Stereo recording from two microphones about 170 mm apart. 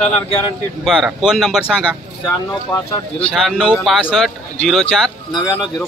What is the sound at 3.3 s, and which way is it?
Speech, centre (ahead or behind).